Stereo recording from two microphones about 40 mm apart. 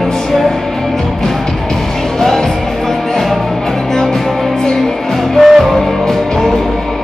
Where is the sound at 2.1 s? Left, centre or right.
Centre.